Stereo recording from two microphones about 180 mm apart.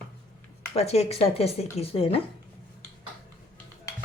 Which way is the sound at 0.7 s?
35° left (ahead or behind).